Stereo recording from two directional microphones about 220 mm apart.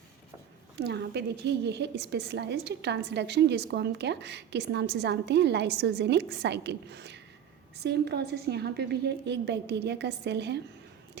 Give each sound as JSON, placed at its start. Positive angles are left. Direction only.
{"t": 0.8, "sound": "a woman's voice", "side_deg": -50}